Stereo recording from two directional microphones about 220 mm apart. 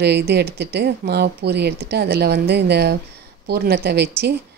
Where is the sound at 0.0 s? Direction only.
45° right (ahead or behind).